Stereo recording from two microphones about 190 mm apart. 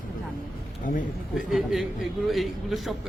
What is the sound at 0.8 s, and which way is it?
Speech, 40° left (ahead or behind).